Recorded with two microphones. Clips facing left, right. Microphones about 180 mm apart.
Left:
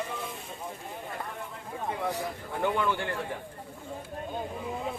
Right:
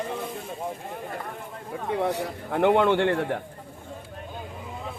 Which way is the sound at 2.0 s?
70° right (ahead or behind).